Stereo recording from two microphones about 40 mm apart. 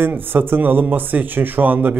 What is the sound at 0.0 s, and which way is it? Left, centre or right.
Speech, right.